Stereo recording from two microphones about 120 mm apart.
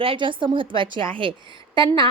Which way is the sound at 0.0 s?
45° right (ahead or behind).